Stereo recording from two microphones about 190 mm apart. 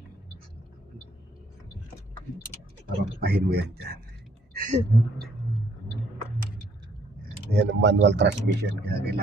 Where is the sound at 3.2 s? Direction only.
55° right (ahead or behind).